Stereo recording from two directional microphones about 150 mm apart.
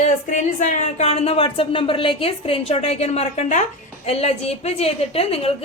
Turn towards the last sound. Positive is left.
turn(degrees=40)  # may be behind; listen again after turning